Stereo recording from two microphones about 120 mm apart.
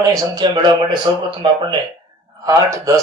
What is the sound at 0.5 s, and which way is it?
A man's voice, 40° right (ahead or behind).